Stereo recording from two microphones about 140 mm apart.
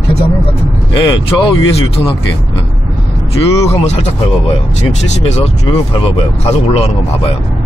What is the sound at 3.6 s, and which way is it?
Speech, 50° left (ahead or behind).